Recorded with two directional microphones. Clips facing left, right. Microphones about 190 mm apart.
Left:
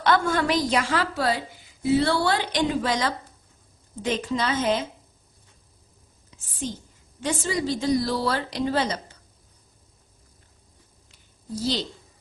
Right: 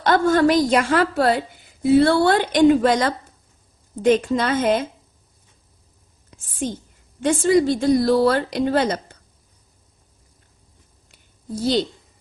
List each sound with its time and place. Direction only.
0.0 s a woman's voice: 40° right (ahead or behind)
6.3 s a woman's voice: 55° right (ahead or behind)
11.1 s a sound: 55° right (ahead or behind)